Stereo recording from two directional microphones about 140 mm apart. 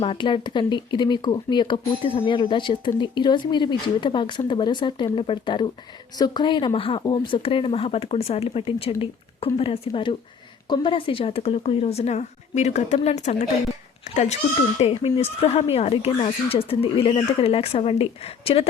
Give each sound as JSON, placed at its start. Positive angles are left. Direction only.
{"t": 0.0, "sound": "speech", "side_deg": 40}